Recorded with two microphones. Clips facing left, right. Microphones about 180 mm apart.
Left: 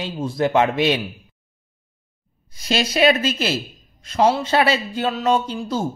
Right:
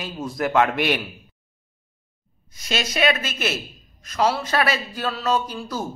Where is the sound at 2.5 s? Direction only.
30° left (ahead or behind).